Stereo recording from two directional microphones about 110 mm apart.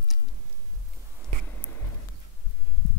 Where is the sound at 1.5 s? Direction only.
20° left (ahead or behind).